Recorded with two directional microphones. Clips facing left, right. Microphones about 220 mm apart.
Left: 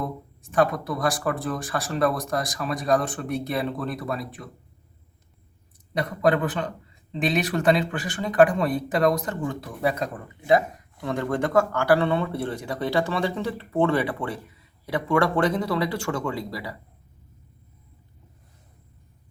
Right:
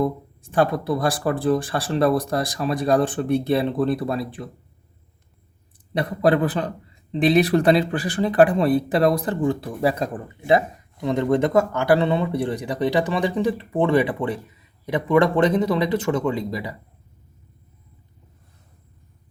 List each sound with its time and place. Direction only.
0.5 s speech: 30° right (ahead or behind)
5.9 s speech: 30° right (ahead or behind)